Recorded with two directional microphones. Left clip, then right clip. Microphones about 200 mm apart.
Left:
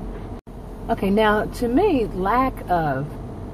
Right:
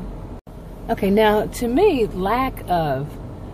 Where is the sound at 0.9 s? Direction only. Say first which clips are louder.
Right 2 dB; 20° right (ahead or behind).